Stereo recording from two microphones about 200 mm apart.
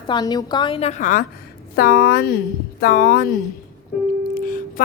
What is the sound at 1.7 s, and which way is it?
Speech, 50° left (ahead or behind).